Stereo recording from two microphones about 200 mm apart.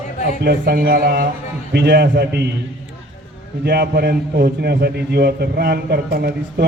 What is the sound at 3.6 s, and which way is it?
A man's voice, 50° right (ahead or behind).